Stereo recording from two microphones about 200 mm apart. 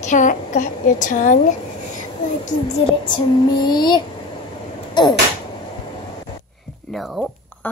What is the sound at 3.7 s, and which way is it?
Speech, 20° left (ahead or behind).